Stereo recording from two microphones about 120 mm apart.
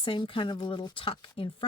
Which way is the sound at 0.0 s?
45° left (ahead or behind).